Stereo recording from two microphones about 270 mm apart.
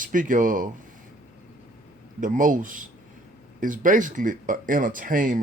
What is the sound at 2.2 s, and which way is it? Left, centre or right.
Speech, right.